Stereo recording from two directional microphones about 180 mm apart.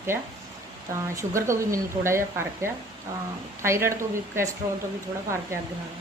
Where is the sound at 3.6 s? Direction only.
15° right (ahead or behind).